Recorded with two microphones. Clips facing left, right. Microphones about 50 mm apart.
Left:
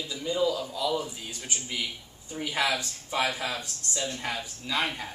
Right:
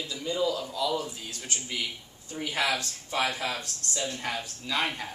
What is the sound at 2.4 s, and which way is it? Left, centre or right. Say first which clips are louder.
Speech: left 1 dB; centre.